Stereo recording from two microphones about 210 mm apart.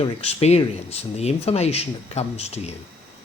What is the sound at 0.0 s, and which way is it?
Speech, 25° left (ahead or behind).